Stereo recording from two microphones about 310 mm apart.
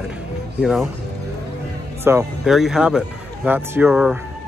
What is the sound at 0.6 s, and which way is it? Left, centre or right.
Speech, centre.